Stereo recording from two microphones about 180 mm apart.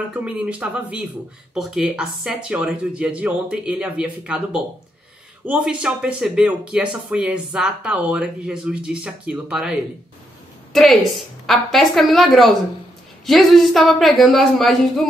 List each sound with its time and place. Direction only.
0.1 s speech: 5° right (ahead or behind)